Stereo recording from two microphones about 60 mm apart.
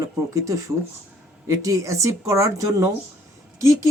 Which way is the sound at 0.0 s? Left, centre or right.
Right.